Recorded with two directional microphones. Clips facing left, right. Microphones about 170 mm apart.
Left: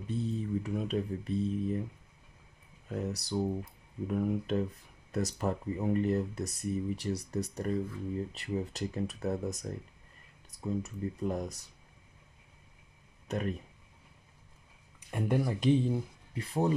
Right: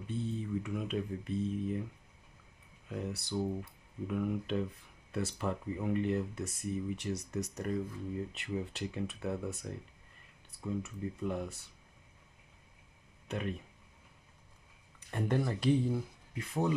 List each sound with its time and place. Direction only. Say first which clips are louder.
0.0 s speech: left 3 dB; 40° left (ahead or behind)
2.9 s speech: left 3 dB; 40° left (ahead or behind)
13.3 s speech: left 3 dB; 40° left (ahead or behind)
15.0 s a sound: left 2 dB; 10° left (ahead or behind)
15.4 s speech: left 3 dB; 20° left (ahead or behind)
16.3 s speech: left 3 dB; 35° left (ahead or behind)